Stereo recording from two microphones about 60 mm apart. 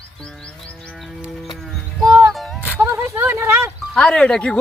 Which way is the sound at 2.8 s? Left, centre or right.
Right.